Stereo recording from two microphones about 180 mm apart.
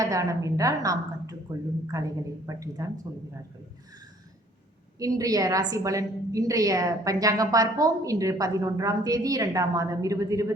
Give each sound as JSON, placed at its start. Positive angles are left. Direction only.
{"t": 0.0, "sound": "a woman's voice", "side_deg": -20}
{"t": 4.9, "sound": "a woman's voice", "side_deg": -20}